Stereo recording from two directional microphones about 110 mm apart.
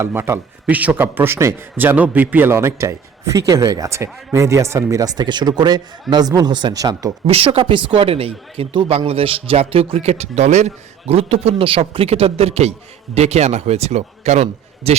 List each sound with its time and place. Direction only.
0.0 s a man's voice: 20° right (ahead or behind)
7.3 s speech: 60° right (ahead or behind); by 10.7 s 90° right
11.1 s a man's voice: 65° right (ahead or behind); by 14.9 s 85° right